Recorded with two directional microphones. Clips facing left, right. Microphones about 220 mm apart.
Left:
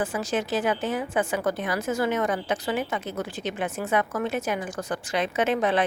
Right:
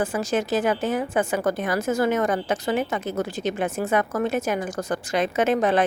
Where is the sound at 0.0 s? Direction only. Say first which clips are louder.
Right 3 dB; 45° right (ahead or behind).